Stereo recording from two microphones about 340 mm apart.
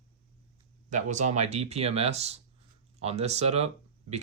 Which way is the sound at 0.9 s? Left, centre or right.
Right.